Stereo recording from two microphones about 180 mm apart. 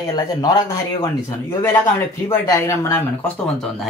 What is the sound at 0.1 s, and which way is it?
Speech, 20° left (ahead or behind).